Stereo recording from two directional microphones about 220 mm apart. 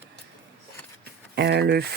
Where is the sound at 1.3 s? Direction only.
50° right (ahead or behind).